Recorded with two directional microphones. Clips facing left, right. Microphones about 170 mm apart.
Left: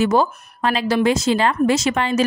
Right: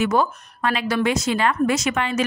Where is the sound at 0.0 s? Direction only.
30° left (ahead or behind).